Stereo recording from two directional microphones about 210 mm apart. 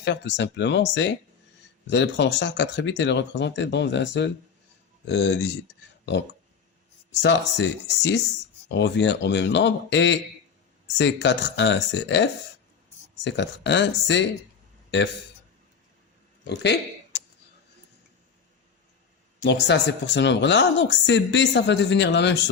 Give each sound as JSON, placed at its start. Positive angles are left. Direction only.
{"t": 0.0, "sound": "speech", "side_deg": 55}
{"t": 7.1, "sound": "speech", "side_deg": 55}
{"t": 14.8, "sound": "a sound", "side_deg": 55}
{"t": 19.4, "sound": "speech", "side_deg": 55}